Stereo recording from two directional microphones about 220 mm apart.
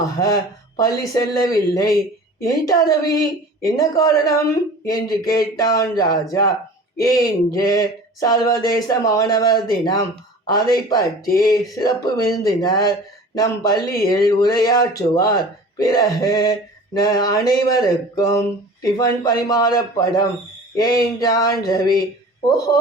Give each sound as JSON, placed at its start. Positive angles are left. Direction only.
{"t": 0.8, "sound": "male singing", "side_deg": 15}